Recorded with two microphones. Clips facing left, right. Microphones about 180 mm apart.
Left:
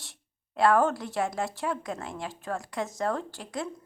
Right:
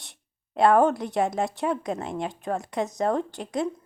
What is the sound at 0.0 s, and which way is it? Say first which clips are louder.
Speech: left 1 dB; 20° right (ahead or behind).